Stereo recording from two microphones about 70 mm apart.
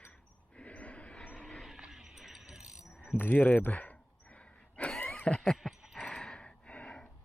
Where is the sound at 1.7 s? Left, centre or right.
Centre.